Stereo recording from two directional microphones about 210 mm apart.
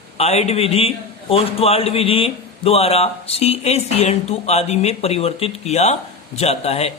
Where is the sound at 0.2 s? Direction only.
30° left (ahead or behind).